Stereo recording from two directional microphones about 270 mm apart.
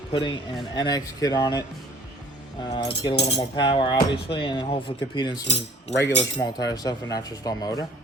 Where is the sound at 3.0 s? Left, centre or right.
Centre.